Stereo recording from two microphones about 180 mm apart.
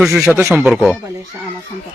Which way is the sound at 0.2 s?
5° right (ahead or behind).